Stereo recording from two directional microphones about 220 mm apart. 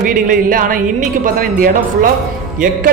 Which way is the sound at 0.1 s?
40° right (ahead or behind).